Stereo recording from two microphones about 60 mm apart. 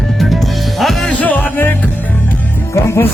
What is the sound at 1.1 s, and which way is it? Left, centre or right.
Music, left.